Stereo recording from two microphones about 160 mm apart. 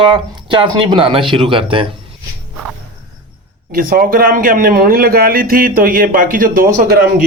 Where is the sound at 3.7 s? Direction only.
65° right (ahead or behind).